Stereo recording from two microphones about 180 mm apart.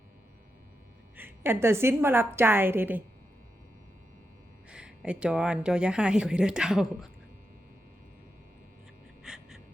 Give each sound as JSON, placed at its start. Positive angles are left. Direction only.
{"t": 1.1, "sound": "a woman's voice", "side_deg": -10}
{"t": 4.7, "sound": "speech", "side_deg": -5}
{"t": 9.2, "sound": "gasp", "side_deg": -5}